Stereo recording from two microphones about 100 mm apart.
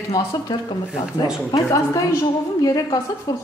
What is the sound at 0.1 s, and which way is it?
Speech, 45° left (ahead or behind).